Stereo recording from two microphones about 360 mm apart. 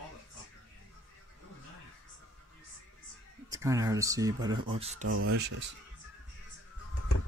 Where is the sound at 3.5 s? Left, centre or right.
Centre.